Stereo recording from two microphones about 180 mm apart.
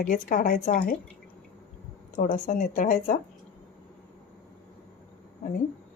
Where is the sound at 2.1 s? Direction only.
45° left (ahead or behind).